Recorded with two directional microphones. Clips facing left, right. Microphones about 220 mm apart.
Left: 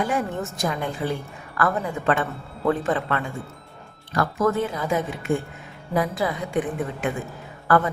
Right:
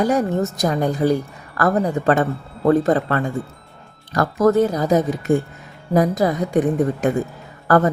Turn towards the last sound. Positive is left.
turn(degrees=-40)  # may be behind; listen again after turning